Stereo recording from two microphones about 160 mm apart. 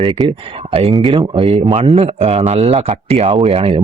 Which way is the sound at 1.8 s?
40° right (ahead or behind).